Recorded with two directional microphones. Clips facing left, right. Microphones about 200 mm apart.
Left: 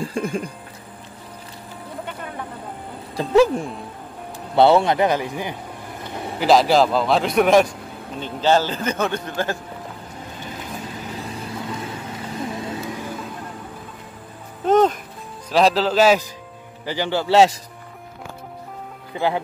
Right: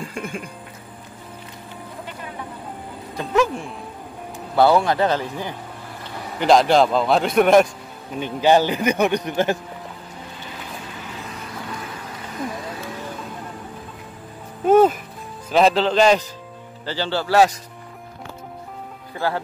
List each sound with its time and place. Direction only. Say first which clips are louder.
0.0 s speech: left 5 dB; 35° left (ahead or behind)
3.2 s a man's voice: left 5 dB; 35° left (ahead or behind); by 5.6 s 15° left (ahead or behind)
6.4 s a man's voice: even; 5° left (ahead or behind)
8.2 s a man's voice: right 2 dB; 15° right (ahead or behind)
10.4 s vehicle: left 5 dB; 40° left (ahead or behind)
11.7 s vehicle: left 3 dB; 25° left (ahead or behind)
14.6 s music: right 2 dB; 10° right (ahead or behind)
15.5 s a man's voice: right 1 dB; centre (ahead or behind)
16.8 s a man's voice: left 2 dB; 15° left (ahead or behind)
19.1 s speech: left 2 dB; 20° left (ahead or behind)